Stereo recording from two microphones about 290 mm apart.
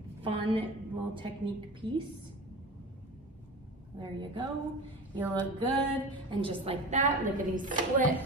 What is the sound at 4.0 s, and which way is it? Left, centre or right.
Speech, centre.